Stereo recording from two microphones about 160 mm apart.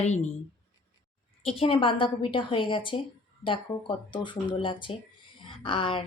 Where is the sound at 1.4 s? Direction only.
35° left (ahead or behind).